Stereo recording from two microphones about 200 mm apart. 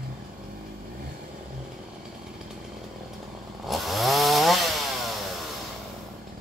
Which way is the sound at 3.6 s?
Centre (ahead or behind).